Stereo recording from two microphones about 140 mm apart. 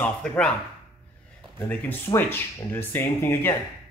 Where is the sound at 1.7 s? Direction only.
10° left (ahead or behind).